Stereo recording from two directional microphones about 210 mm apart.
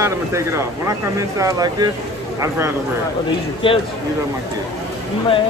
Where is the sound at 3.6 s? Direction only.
25° left (ahead or behind).